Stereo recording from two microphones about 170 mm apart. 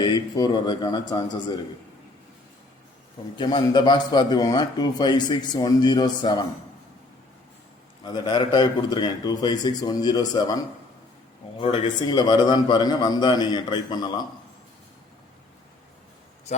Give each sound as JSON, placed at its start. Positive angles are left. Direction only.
{"t": 0.0, "sound": "a man's voice", "side_deg": 25}
{"t": 3.3, "sound": "a man's voice", "side_deg": 25}
{"t": 8.0, "sound": "a man's voice", "side_deg": 25}
{"t": 11.6, "sound": "a man's voice", "side_deg": 30}